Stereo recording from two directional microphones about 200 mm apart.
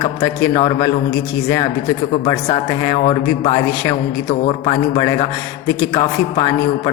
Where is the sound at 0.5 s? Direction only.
25° left (ahead or behind).